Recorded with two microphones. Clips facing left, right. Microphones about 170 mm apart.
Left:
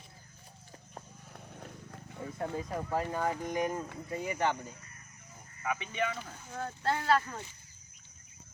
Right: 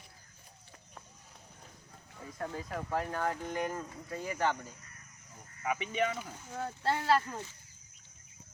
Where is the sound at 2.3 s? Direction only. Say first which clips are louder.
Left 2 dB; 20° left (ahead or behind); by 4.7 s centre (ahead or behind).